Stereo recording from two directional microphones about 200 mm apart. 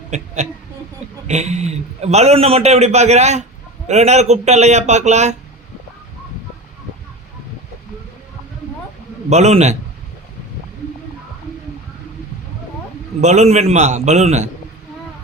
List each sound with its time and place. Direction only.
1.3 s a man's voice: 35° right (ahead or behind)
9.3 s a man's voice: 35° right (ahead or behind)
13.2 s a man's voice: 35° right (ahead or behind)